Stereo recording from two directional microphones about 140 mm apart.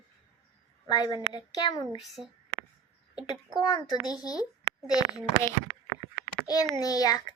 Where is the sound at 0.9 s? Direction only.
30° left (ahead or behind).